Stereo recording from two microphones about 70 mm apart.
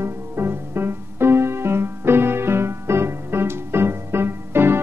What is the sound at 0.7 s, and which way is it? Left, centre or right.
Keyboard, right.